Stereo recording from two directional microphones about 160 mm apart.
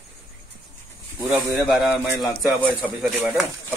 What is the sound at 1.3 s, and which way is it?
Speech, 5° right (ahead or behind).